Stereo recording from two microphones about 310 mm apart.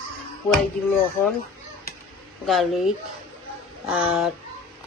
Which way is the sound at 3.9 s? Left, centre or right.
Centre.